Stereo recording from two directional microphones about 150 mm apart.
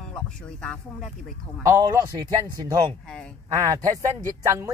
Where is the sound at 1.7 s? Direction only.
25° right (ahead or behind).